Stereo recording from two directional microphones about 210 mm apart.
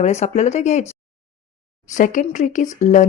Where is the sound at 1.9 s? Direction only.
35° left (ahead or behind).